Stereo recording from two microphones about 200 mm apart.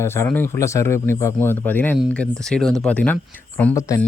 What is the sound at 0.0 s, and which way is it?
Speech, 10° left (ahead or behind).